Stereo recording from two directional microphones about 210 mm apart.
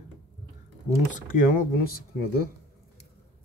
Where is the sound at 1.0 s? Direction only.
40° left (ahead or behind).